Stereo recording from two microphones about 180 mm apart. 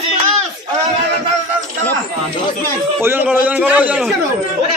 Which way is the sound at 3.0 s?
10° right (ahead or behind).